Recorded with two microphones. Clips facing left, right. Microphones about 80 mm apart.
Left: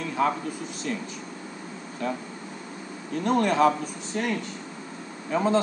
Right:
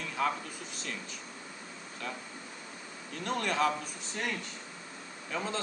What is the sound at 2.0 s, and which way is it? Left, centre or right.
Speech, left.